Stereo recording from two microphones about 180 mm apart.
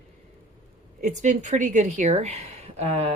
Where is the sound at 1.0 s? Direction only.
40° right (ahead or behind).